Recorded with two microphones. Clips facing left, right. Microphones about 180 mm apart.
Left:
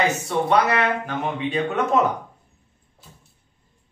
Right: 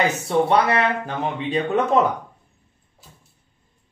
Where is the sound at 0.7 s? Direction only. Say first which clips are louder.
Right 1 dB; 30° right (ahead or behind).